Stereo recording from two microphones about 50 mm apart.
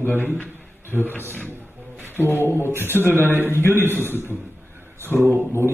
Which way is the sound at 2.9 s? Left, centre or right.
Left.